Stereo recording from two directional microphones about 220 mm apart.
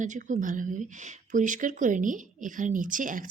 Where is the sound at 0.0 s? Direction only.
35° right (ahead or behind).